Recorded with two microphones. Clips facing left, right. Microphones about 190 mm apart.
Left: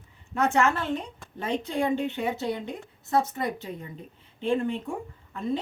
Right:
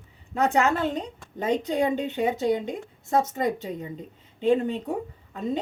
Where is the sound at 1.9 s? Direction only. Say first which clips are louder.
Right 2 dB; 45° right (ahead or behind).